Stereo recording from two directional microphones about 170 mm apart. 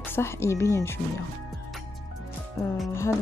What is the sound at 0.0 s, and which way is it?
Speech, 15° left (ahead or behind).